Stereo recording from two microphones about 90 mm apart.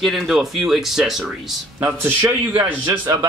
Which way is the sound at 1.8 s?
30° right (ahead or behind).